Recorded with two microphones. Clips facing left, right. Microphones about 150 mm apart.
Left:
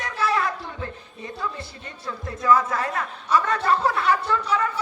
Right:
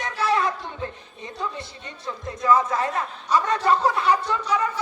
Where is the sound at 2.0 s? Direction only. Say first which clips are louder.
Even; 20° right (ahead or behind).